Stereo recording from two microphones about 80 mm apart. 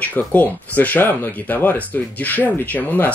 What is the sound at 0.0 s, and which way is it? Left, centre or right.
Speech, left.